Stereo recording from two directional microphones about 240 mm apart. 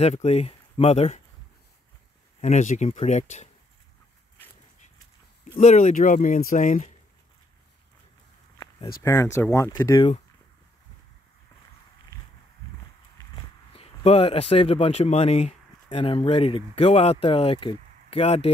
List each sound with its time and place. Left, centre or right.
0.0 s speech: left
2.4 s speech: left
5.6 s speech: left
9.0 s speech: centre
13.4 s speech: left